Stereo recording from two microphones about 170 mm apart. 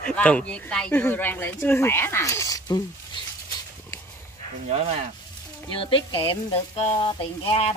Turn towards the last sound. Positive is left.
turn(degrees=35)  # may be behind; listen again after turning